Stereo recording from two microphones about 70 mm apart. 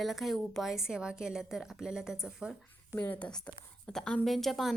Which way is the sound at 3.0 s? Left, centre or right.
Centre.